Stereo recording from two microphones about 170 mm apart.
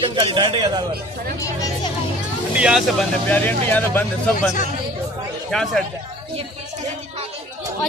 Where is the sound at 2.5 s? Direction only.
5° right (ahead or behind).